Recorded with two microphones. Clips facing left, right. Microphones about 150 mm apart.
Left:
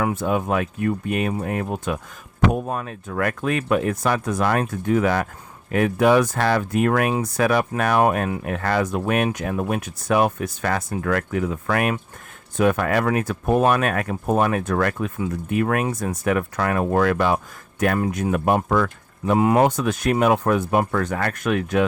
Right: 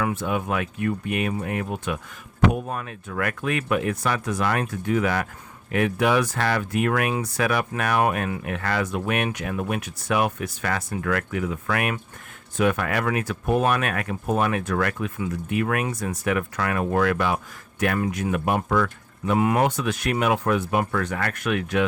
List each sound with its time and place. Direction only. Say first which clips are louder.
0.1 s speech: left 4 dB; 40° left (ahead or behind)
19.6 s speech: left 4 dB; 45° left (ahead or behind)